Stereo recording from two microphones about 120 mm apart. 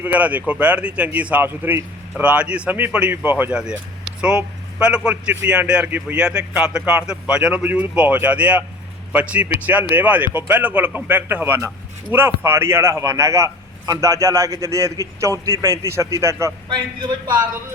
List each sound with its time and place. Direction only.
0.0 s a man's voice: 10° right (ahead or behind)